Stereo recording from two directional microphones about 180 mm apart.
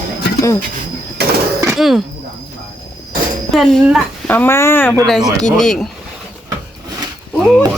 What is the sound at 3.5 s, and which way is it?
Speech, centre (ahead or behind).